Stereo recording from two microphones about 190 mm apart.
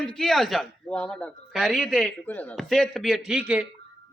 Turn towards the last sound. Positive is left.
turn(degrees=-5)  # may be behind; listen again after turning